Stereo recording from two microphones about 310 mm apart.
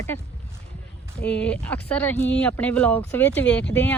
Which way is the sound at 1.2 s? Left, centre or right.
Centre.